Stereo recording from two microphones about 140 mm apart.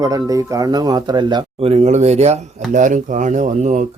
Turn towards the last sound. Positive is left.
turn(degrees=-60)  # may be behind; listen again after turning